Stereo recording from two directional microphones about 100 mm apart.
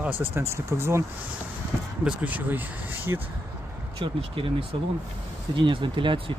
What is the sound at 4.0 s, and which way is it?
Speech, 60° right (ahead or behind).